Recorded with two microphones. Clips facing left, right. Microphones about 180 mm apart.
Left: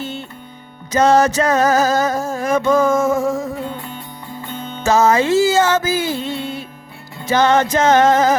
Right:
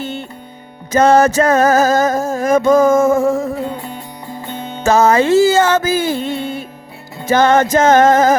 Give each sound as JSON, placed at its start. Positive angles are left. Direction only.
{"t": 0.0, "sound": "music", "side_deg": -55}
{"t": 4.8, "sound": "music", "side_deg": -55}